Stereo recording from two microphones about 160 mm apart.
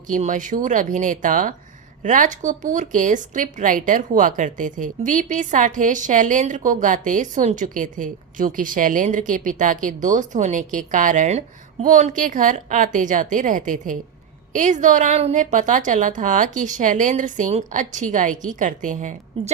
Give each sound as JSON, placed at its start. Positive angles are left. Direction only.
{"t": 0.1, "sound": "a woman's voice", "side_deg": -55}